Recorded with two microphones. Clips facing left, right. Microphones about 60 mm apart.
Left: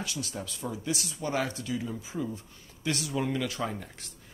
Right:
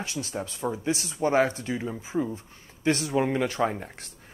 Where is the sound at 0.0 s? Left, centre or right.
Right.